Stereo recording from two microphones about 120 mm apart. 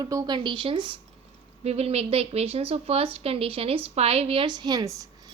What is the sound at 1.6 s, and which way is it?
Speech, 60° right (ahead or behind).